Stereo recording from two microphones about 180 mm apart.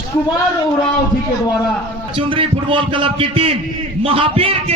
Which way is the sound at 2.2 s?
30° right (ahead or behind).